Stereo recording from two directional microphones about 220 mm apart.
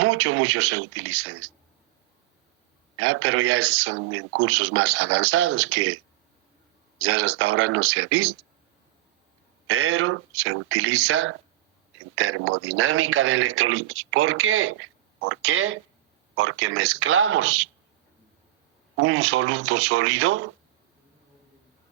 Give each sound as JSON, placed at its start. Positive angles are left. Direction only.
{"t": 0.0, "sound": "speech", "side_deg": -65}
{"t": 3.0, "sound": "speech", "side_deg": -70}
{"t": 7.0, "sound": "speech", "side_deg": -70}
{"t": 9.6, "sound": "speech", "side_deg": -70}
{"t": 18.9, "sound": "speech", "side_deg": -65}